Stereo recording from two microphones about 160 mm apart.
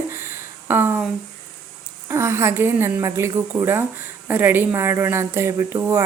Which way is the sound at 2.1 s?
15° right (ahead or behind).